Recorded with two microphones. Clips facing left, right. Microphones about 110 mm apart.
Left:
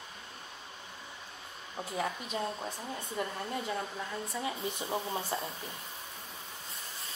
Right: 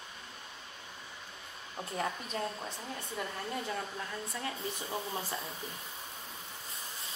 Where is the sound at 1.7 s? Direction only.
Centre (ahead or behind).